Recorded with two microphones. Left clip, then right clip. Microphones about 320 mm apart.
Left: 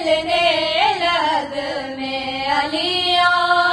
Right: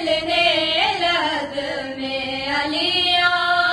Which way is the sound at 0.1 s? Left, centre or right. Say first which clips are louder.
Left 1 dB; left.